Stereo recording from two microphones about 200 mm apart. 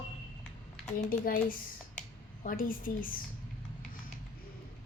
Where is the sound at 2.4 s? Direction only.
45° left (ahead or behind).